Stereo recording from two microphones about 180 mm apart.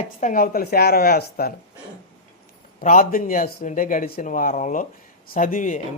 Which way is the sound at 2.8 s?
50° left (ahead or behind).